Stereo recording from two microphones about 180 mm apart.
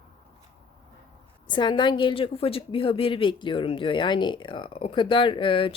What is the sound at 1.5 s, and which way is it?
A woman's voice, 25° left (ahead or behind).